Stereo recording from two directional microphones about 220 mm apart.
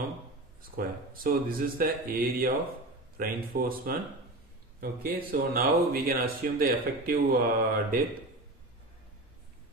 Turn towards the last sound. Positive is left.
turn(degrees=-45)  # may be behind; listen again after turning